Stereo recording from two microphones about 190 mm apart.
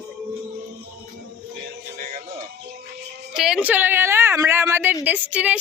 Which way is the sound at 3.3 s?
Centre (ahead or behind).